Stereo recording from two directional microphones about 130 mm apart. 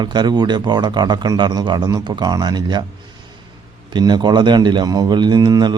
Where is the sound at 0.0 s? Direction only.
35° right (ahead or behind).